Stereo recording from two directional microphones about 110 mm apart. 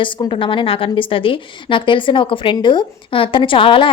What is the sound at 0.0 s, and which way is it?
A woman's voice, 50° left (ahead or behind).